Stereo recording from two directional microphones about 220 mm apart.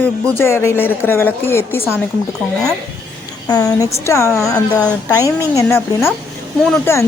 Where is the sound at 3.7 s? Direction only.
15° left (ahead or behind).